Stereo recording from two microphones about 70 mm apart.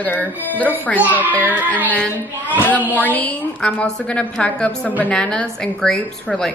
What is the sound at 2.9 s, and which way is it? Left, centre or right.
A woman's voice, left.